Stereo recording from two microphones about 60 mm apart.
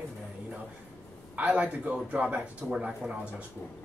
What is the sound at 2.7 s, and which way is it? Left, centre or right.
Speech, centre.